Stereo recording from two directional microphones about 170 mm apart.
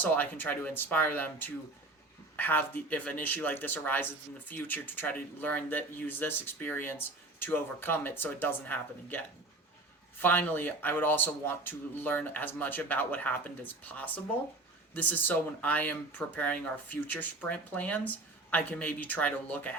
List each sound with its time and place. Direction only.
0.0 s speech: 10° left (ahead or behind)